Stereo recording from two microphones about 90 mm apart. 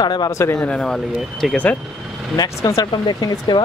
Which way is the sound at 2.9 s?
50° left (ahead or behind).